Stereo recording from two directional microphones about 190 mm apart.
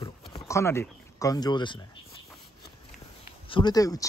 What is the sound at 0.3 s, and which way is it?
Speech, 15° left (ahead or behind).